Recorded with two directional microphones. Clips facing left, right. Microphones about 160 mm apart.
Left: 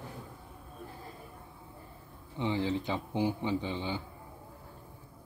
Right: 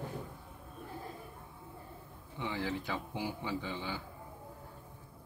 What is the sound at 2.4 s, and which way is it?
A man's voice, 20° left (ahead or behind).